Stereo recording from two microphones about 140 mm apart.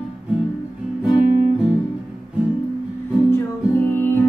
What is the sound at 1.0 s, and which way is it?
Music, 5° right (ahead or behind).